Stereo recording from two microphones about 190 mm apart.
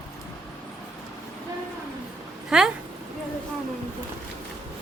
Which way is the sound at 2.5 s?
5° right (ahead or behind).